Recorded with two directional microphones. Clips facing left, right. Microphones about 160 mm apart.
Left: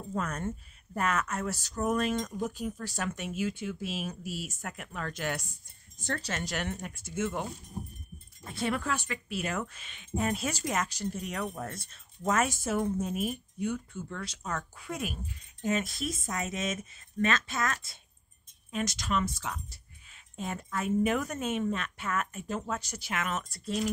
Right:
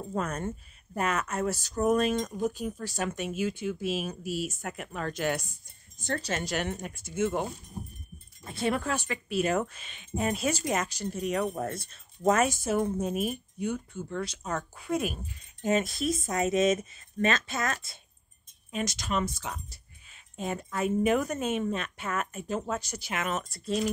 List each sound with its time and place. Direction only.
0.1 s speech: 25° right (ahead or behind)
8.6 s speech: 25° right (ahead or behind)
11.3 s speech: 35° right (ahead or behind); by 19.2 s 15° right (ahead or behind)
20.3 s speech: 20° right (ahead or behind)